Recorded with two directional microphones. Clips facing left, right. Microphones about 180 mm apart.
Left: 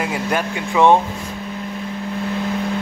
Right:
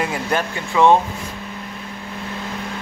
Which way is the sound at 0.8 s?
20° left (ahead or behind).